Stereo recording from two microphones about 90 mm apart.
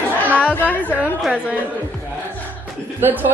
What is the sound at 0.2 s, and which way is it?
Chatter, 15° left (ahead or behind).